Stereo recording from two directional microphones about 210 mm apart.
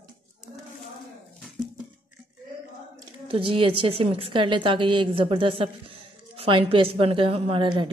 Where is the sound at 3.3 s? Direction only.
25° right (ahead or behind).